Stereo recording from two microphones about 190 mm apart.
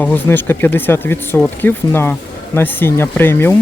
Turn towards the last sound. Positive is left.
turn(degrees=10)  # may be behind; listen again after turning